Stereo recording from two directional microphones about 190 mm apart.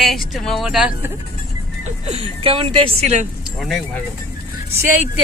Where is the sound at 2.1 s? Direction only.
30° right (ahead or behind).